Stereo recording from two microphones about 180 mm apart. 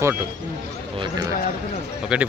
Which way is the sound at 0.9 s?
25° right (ahead or behind).